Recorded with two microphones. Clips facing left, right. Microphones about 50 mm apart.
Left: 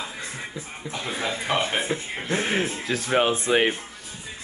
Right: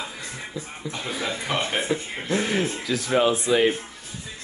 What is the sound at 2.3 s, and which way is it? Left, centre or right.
Speech, left.